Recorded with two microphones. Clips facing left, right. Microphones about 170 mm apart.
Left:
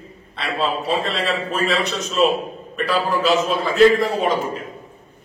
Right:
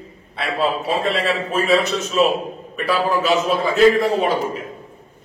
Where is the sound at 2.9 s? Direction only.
Centre (ahead or behind).